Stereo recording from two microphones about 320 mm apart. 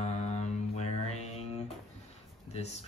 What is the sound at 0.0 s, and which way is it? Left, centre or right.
Mantra, left.